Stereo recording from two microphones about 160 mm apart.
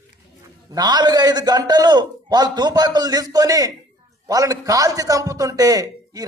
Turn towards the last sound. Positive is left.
turn(degrees=-20)  # may be behind; listen again after turning